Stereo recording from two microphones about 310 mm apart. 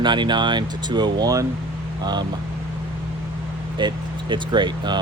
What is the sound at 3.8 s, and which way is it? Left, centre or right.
Speech, centre.